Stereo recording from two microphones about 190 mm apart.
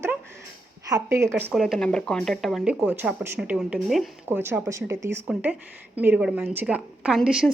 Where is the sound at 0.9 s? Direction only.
15° right (ahead or behind).